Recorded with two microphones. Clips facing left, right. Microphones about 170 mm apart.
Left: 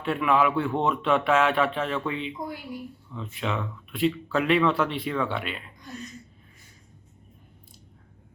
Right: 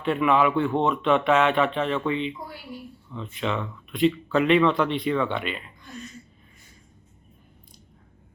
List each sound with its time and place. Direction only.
0.0 s speech: 5° left (ahead or behind)
2.7 s speech: 15° left (ahead or behind)
3.1 s speech: 5° left (ahead or behind)